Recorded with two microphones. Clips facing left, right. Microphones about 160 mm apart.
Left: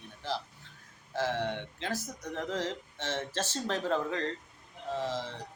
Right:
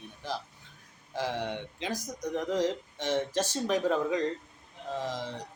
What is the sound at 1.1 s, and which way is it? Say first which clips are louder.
Speech: left 1 dB; 15° right (ahead or behind).